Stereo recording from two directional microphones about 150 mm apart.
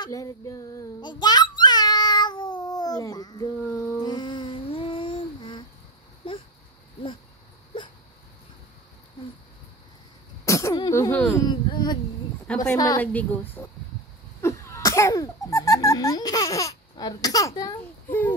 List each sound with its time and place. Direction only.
0.0 s child singing: 25° left (ahead or behind)
3.5 s child singing: 10° left (ahead or behind)
4.0 s humming: 30° left (ahead or behind)
6.2 s a sound: 40° left (ahead or behind)
10.4 s a sound: 20° left (ahead or behind)
11.4 s a sound: 30° left (ahead or behind)
12.7 s a woman's voice: 25° left (ahead or behind)
13.0 s a woman's voice: 10° left (ahead or behind)
14.4 s cough: 20° left (ahead or behind)